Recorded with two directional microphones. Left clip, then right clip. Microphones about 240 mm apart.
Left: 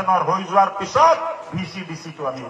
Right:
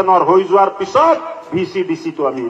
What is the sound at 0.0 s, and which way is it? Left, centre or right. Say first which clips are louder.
A man's voice: right 8 dB; right.